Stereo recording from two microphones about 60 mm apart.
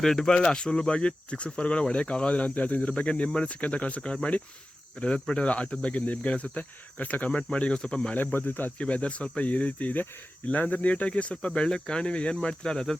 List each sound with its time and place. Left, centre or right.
0.0 s speech: centre
8.1 s speech: left
8.8 s speech: centre